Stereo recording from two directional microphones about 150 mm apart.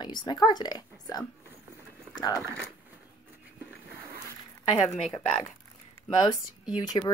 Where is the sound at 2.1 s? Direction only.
25° left (ahead or behind).